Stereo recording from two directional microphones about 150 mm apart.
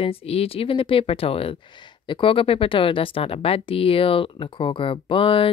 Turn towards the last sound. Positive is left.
turn(degrees=35)  # may be behind; listen again after turning